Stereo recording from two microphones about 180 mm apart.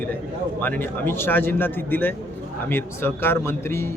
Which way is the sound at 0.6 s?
10° left (ahead or behind).